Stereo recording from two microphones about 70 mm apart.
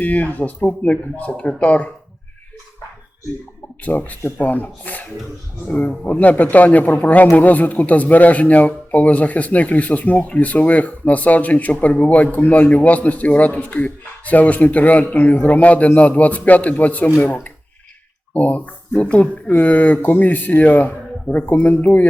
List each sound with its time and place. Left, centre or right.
0.0 s speech: left
3.8 s speech: left